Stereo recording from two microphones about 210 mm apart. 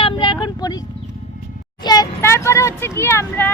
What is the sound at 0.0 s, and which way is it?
Vehicle, 20° left (ahead or behind).